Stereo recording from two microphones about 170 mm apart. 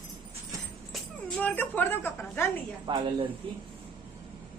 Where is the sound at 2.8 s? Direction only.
30° right (ahead or behind).